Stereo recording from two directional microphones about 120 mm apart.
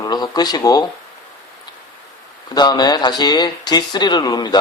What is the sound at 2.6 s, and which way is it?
Speech, 35° left (ahead or behind).